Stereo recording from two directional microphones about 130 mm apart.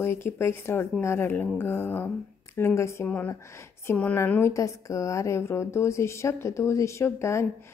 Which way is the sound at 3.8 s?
15° left (ahead or behind).